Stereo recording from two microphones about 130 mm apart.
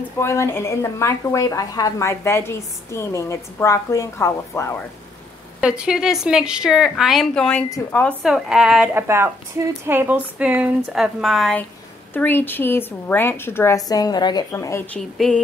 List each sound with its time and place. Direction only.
0.2 s a woman's voice: 20° left (ahead or behind)
5.6 s a woman's voice: 5° right (ahead or behind)
8.2 s a woman's voice: 5° right (ahead or behind)
8.9 s speech: 20° right (ahead or behind); by 11.5 s centre (ahead or behind)
12.1 s a woman's voice: 15° left (ahead or behind)
15.0 s a woman's voice: 5° left (ahead or behind)